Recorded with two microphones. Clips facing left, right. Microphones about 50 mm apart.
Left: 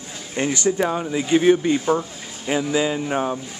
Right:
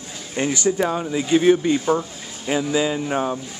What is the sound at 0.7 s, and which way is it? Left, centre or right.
Speech, centre.